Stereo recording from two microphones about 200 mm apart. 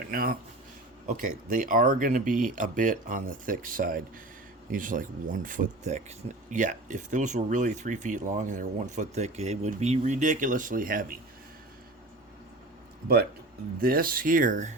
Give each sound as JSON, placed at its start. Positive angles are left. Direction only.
{"t": 0.1, "sound": "speech", "side_deg": -45}
{"t": 13.8, "sound": "speech", "side_deg": -45}